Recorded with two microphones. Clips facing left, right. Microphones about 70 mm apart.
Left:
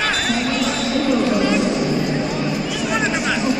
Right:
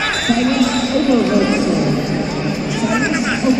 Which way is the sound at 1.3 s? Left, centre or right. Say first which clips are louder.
Right 3 dB; centre.